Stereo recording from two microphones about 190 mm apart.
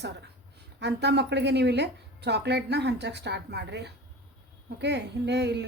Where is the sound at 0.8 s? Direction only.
65° right (ahead or behind).